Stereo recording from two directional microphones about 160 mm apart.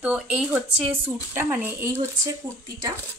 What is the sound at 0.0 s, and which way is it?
A woman's voice, 5° right (ahead or behind).